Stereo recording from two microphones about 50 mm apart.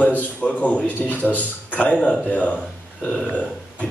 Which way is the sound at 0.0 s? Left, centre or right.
Left.